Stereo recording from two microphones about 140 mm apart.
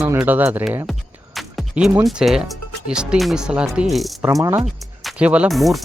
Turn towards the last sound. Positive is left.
turn(degrees=0)  # may be behind; listen again after turning